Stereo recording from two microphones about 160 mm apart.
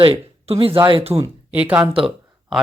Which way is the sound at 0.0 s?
35° right (ahead or behind).